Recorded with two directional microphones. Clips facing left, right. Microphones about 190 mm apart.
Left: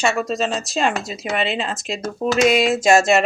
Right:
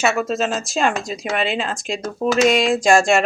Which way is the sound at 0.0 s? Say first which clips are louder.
Right 1 dB; centre (ahead or behind).